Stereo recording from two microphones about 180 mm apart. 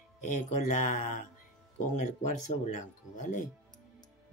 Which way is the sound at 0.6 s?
45° left (ahead or behind).